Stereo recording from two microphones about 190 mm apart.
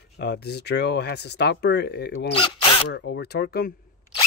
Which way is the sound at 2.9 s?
60° left (ahead or behind).